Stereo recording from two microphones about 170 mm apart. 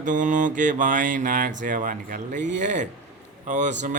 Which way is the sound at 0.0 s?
50° right (ahead or behind).